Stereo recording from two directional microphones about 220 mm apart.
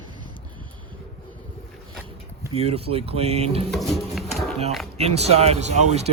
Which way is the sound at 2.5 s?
25° right (ahead or behind).